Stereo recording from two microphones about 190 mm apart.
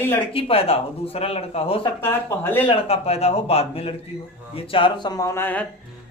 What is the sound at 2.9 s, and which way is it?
A man's voice, 30° left (ahead or behind).